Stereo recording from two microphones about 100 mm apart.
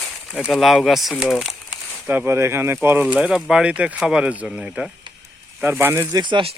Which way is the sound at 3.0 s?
10° right (ahead or behind).